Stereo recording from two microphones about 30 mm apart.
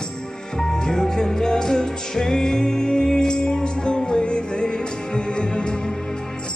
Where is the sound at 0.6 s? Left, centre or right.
Centre.